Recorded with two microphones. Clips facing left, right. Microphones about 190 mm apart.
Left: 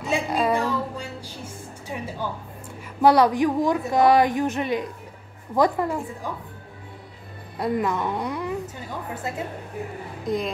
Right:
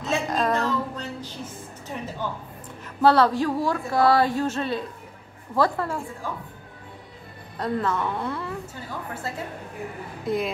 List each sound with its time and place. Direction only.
0.0 s a sound: 10° left (ahead or behind)
3.0 s a woman's voice: 15° left (ahead or behind)
7.5 s a woman's voice: 15° left (ahead or behind)
10.2 s speech: 5° right (ahead or behind)